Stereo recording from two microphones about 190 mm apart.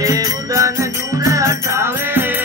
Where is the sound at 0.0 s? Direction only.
20° right (ahead or behind).